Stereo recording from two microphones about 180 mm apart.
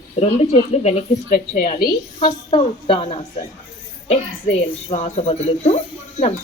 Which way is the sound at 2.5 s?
30° left (ahead or behind).